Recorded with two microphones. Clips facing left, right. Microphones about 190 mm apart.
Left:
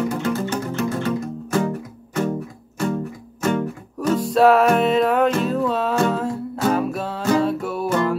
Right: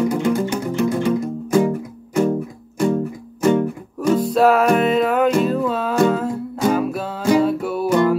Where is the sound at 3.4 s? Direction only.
15° right (ahead or behind).